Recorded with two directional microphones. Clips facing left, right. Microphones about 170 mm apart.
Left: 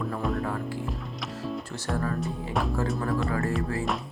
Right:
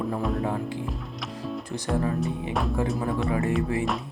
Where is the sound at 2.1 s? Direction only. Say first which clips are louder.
Right 2 dB; centre (ahead or behind).